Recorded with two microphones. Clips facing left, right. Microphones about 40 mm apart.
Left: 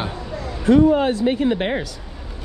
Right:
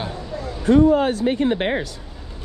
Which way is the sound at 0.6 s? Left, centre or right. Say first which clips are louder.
Even; left.